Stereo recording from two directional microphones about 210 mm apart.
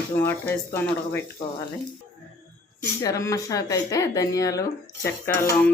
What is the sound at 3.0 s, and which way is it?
Speech, 15° left (ahead or behind).